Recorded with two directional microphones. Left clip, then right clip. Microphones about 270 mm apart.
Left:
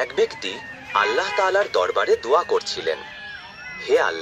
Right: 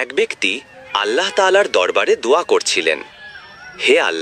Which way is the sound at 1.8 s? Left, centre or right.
Right.